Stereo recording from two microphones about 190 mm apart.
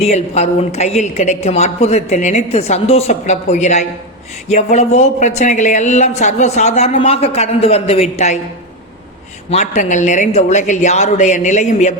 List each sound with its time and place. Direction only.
0.0 s a woman's voice: 35° left (ahead or behind)
9.5 s a woman's voice: 40° left (ahead or behind)